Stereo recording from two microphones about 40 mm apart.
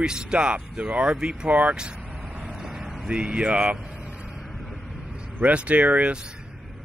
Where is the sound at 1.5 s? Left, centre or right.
Right.